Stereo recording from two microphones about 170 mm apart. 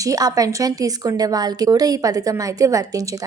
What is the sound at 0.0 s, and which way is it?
A woman's voice, 20° right (ahead or behind).